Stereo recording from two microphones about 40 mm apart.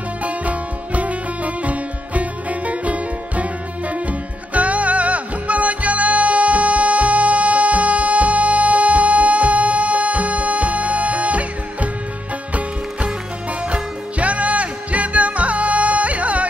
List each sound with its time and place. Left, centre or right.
0.2 s music: right